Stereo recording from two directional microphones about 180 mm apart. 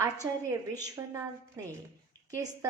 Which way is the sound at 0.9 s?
15° right (ahead or behind).